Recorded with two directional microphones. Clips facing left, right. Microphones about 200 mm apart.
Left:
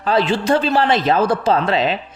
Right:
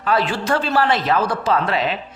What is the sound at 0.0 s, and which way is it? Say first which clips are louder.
A woman's voice: left 3 dB; 25° left (ahead or behind).